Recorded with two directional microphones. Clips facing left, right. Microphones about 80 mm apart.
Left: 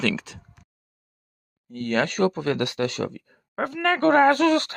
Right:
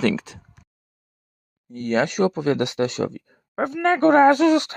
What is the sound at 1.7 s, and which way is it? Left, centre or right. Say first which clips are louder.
Speech: right 2 dB; centre.